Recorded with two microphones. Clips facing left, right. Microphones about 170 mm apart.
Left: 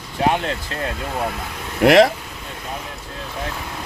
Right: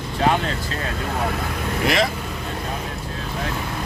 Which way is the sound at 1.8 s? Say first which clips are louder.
Left 9 dB; 70° left (ahead or behind).